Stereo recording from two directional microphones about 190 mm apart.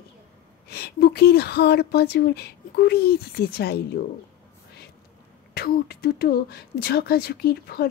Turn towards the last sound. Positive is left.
turn(degrees=55)  # may be behind; listen again after turning